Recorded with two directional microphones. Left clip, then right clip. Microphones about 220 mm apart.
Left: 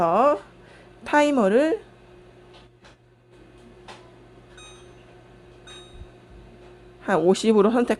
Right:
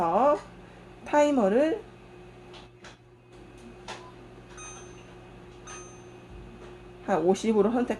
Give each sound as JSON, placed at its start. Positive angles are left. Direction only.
{"t": 0.0, "sound": "a sound", "side_deg": 50}
{"t": 1.0, "sound": "speech", "side_deg": 40}
{"t": 7.0, "sound": "speech", "side_deg": 45}